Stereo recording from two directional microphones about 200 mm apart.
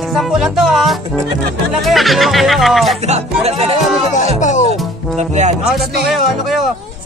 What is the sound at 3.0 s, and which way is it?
Speech, 30° right (ahead or behind).